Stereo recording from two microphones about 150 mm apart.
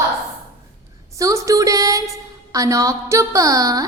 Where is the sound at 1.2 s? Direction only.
20° right (ahead or behind).